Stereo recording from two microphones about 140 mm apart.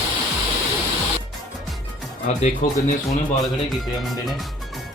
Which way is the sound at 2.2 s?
55° left (ahead or behind).